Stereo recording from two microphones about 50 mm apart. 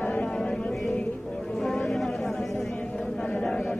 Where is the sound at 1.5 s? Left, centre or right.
Centre.